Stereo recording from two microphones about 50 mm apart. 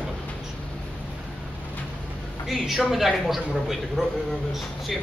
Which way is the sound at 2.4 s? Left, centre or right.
Centre.